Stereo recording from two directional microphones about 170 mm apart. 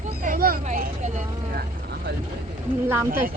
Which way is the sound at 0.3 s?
60° right (ahead or behind).